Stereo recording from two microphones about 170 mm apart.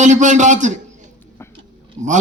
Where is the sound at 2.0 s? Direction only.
45° right (ahead or behind).